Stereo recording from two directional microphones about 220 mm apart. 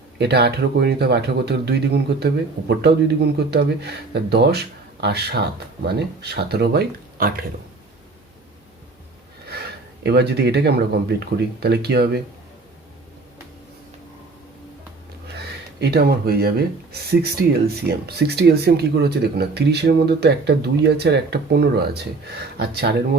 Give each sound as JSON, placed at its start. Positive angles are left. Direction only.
{"t": 0.2, "sound": "speech", "side_deg": -50}
{"t": 9.5, "sound": "speech", "side_deg": -45}
{"t": 15.4, "sound": "speech", "side_deg": -50}